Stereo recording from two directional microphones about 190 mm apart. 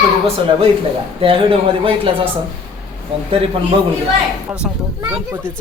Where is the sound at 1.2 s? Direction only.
30° right (ahead or behind).